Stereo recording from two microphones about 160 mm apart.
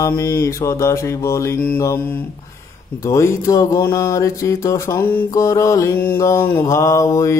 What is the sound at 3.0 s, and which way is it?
Mantra, 20° left (ahead or behind).